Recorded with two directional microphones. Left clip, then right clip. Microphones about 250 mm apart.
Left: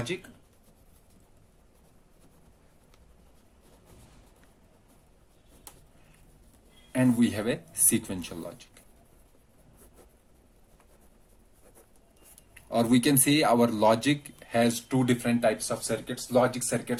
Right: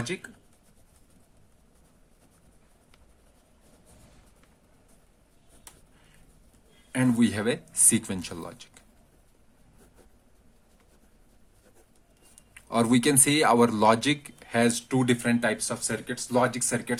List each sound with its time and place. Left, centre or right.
6.9 s speech: right
12.7 s speech: right